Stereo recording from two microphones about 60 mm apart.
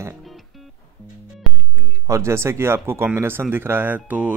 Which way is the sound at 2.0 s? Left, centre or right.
Right.